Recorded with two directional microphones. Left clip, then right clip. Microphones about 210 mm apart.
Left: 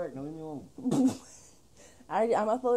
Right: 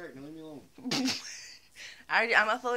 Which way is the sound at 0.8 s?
30° right (ahead or behind).